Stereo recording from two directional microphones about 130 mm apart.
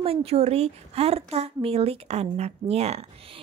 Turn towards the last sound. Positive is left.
turn(degrees=-55)  # may be behind; listen again after turning